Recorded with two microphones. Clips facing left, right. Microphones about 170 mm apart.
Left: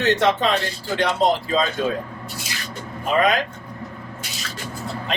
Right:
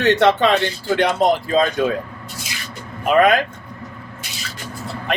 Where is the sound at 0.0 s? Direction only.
65° right (ahead or behind).